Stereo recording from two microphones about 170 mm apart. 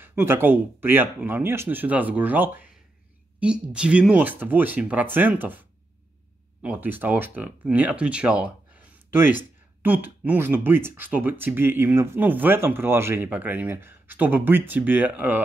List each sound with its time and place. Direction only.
0.0 s speech: 15° right (ahead or behind)